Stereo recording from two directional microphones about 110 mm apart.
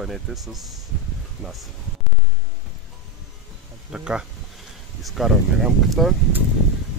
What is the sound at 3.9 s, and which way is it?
Speech, 5° right (ahead or behind).